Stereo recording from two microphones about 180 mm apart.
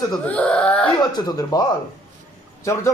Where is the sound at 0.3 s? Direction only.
5° left (ahead or behind).